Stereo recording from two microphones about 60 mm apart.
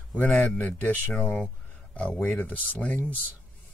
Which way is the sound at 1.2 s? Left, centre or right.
Centre.